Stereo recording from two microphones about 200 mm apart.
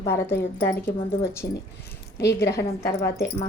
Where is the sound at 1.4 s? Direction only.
45° left (ahead or behind).